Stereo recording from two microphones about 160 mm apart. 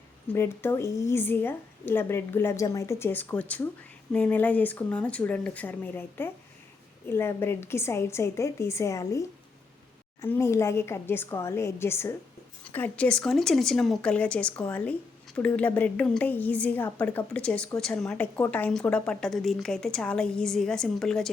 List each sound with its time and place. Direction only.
0.3 s a woman's voice: 15° left (ahead or behind)